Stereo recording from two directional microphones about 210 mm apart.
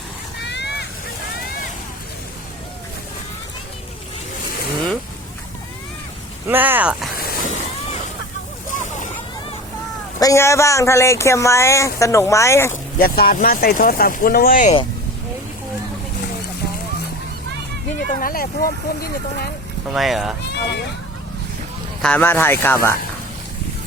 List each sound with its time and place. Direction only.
0.4 s vehicle: 55° left (ahead or behind)
6.5 s speech: 10° right (ahead or behind)
7.2 s vehicle: 40° left (ahead or behind)
10.2 s speech: 15° left (ahead or behind)
13.0 s speech: 45° left (ahead or behind)
18.1 s speech: 40° left (ahead or behind)
19.9 s speech: centre (ahead or behind)
20.5 s speech: 50° left (ahead or behind)
22.0 s speech: 10° left (ahead or behind)